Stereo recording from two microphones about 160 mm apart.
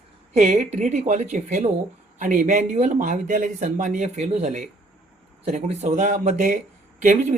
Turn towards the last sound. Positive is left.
turn(degrees=-50)  # may be behind; listen again after turning